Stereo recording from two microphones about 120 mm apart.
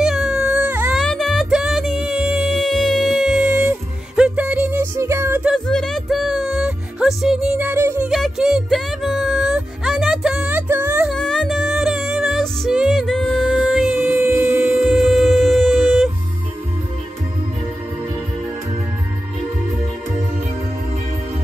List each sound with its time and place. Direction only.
0.0 s a sound: 5° right (ahead or behind)
0.9 s music: 5° left (ahead or behind); by 5.4 s 25° right (ahead or behind)
5.4 s music: centre (ahead or behind); by 8.1 s 20° right (ahead or behind)
8.1 s music: 5° right (ahead or behind)
11.1 s music: 5° left (ahead or behind); by 14.7 s 15° right (ahead or behind)
14.7 s a sound: 5° right (ahead or behind)